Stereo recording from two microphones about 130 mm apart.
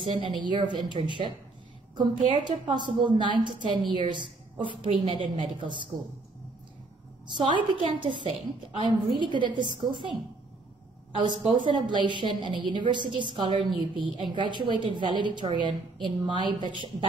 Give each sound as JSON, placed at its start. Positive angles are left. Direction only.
{"t": 0.0, "sound": "a woman's voice", "side_deg": -40}
{"t": 7.3, "sound": "a woman's voice", "side_deg": -40}
{"t": 11.1, "sound": "a woman's voice", "side_deg": -40}